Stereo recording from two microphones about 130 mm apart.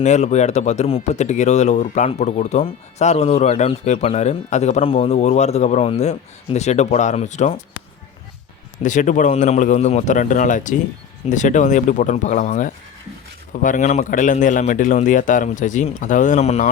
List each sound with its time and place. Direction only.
0.0 s speech: 60° left (ahead or behind)
8.8 s a man's voice: 75° left (ahead or behind)
13.5 s a man's voice: 90° left; by 16.6 s 55° left (ahead or behind)